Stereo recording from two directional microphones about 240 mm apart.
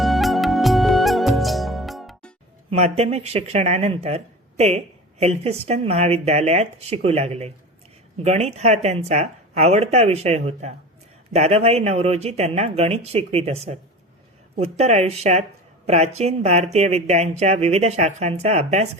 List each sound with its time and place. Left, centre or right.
0.0 s music: centre
2.6 s speech: right